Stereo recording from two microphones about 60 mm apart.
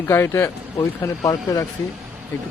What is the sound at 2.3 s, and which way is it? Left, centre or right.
Speech, left.